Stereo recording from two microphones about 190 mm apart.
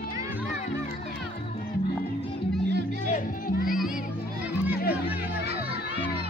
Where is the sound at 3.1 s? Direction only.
50° left (ahead or behind).